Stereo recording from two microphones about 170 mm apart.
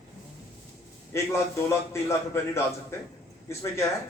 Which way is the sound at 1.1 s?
15° left (ahead or behind).